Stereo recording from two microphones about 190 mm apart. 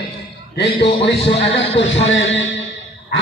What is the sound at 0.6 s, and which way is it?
A man's voice, 65° left (ahead or behind).